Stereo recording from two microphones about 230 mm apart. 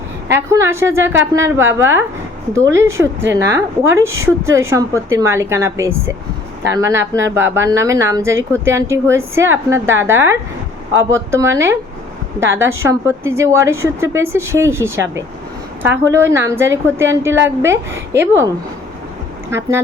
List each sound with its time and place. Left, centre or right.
0.3 s a woman's voice: centre
3.3 s a woman's voice: centre